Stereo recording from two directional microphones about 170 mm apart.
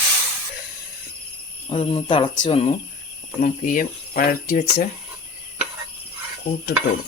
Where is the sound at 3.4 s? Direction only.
50° left (ahead or behind).